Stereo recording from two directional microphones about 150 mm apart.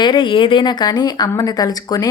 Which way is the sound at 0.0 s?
30° left (ahead or behind).